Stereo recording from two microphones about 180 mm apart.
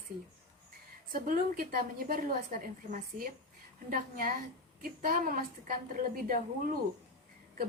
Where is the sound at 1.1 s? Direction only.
50° right (ahead or behind).